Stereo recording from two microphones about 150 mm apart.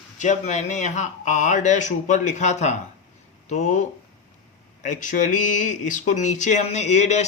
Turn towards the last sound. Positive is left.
turn(degrees=50)  # may be behind; listen again after turning